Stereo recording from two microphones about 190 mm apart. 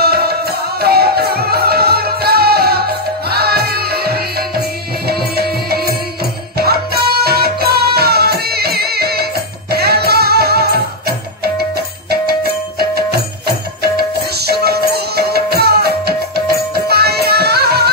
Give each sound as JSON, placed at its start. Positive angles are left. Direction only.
{"t": 0.0, "sound": "music", "side_deg": -55}